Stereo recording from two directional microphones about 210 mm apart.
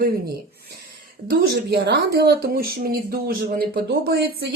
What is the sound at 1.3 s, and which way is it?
Speech, 50° right (ahead or behind).